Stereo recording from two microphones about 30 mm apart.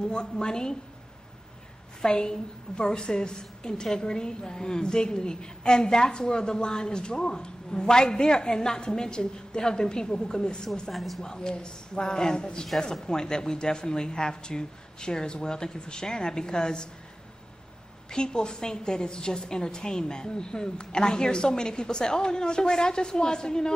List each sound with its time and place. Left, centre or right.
0.0 s a woman's voice: left
2.0 s a woman's voice: left
10.9 s speech: centre
11.2 s a woman's voice: left
18.1 s a woman's voice: left